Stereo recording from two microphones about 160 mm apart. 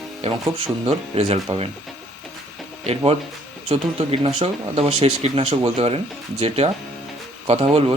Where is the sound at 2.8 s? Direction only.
40° right (ahead or behind).